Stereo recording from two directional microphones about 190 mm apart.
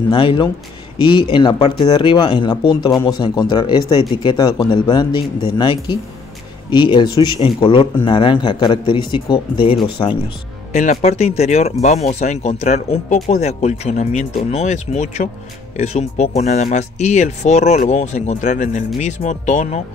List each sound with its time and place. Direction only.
0.1 s speech: 25° left (ahead or behind)
10.7 s speech: 40° left (ahead or behind)